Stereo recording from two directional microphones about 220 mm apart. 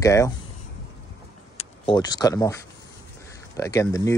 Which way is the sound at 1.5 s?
25° left (ahead or behind).